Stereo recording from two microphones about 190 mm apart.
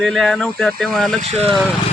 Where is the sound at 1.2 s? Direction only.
35° right (ahead or behind).